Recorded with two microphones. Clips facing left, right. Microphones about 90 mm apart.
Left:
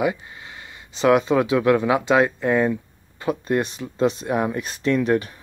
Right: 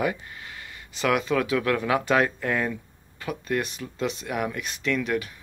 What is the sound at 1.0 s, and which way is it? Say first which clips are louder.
Speech: left 6 dB; 25° left (ahead or behind).